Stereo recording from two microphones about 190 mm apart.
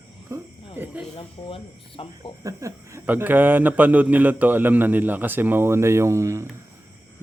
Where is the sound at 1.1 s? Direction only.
30° left (ahead or behind).